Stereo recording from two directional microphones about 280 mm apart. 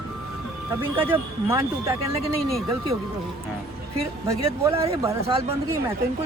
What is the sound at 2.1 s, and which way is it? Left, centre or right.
Speech, right.